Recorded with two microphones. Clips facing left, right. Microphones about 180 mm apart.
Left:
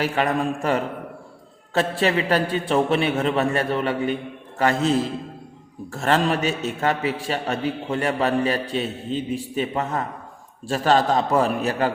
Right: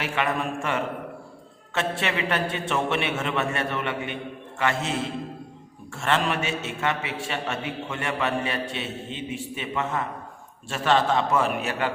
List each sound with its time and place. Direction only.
0.0 s a man's voice: 35° left (ahead or behind)